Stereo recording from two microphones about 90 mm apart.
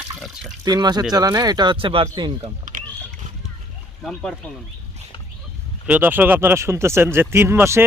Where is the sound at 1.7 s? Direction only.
85° right.